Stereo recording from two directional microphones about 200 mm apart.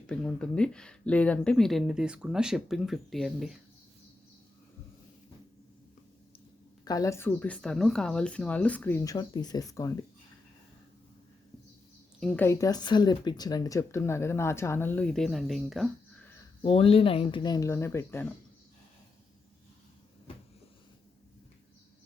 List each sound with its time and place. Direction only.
0.1 s speech: 5° left (ahead or behind)
6.8 s speech: 15° left (ahead or behind)
12.2 s speech: centre (ahead or behind)
12.5 s speech: 15° left (ahead or behind); by 15.9 s centre (ahead or behind)
16.6 s speech: 30° left (ahead or behind); by 18.3 s 10° left (ahead or behind)